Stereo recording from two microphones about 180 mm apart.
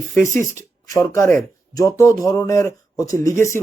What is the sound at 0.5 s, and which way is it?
Speech, 15° left (ahead or behind).